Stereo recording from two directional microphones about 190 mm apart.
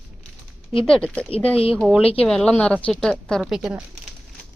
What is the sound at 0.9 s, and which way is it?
Speech, 5° left (ahead or behind).